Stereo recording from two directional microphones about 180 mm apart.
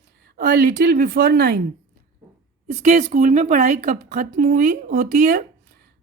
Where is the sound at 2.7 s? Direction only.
40° right (ahead or behind).